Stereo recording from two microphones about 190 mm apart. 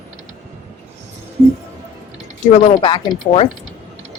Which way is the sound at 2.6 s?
25° left (ahead or behind).